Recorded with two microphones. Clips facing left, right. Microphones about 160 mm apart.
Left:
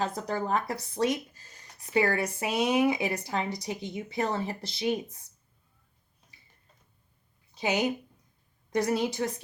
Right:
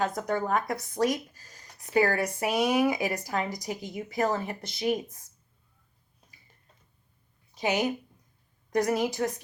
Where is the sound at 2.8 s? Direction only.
25° left (ahead or behind).